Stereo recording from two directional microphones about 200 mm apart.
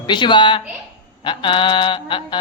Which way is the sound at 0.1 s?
25° left (ahead or behind).